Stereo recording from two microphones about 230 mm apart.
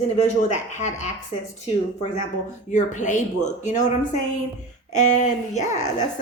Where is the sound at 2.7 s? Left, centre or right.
Left.